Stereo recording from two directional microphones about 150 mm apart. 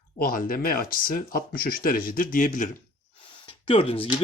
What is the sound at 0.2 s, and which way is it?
Speech, 70° left (ahead or behind).